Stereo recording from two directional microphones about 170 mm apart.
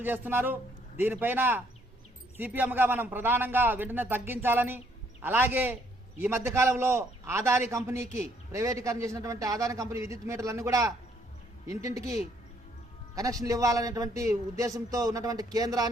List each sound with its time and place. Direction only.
0.0 s a man's voice: 10° right (ahead or behind)
13.1 s a man's voice: 20° right (ahead or behind)